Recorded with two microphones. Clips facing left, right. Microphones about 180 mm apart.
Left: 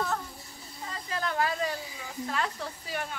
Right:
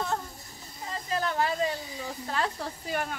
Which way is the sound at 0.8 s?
30° right (ahead or behind).